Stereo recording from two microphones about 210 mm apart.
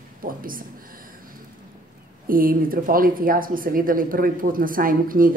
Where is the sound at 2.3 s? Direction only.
40° right (ahead or behind).